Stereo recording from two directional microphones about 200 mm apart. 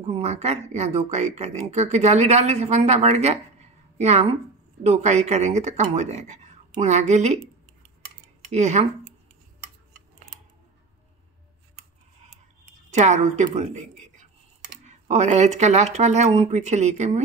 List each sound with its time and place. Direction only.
0.0 s speech: 30° right (ahead or behind)
8.5 s speech: 35° right (ahead or behind)
12.9 s a woman's voice: 35° right (ahead or behind)